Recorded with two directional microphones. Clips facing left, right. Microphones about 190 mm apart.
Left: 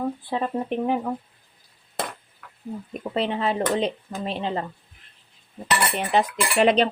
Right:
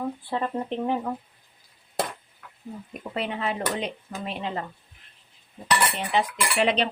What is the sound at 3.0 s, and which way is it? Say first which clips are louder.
Speech: left 5 dB; 30° left (ahead or behind).